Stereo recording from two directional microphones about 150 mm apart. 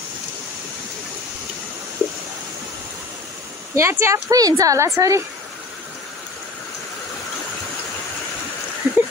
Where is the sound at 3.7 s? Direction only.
15° right (ahead or behind).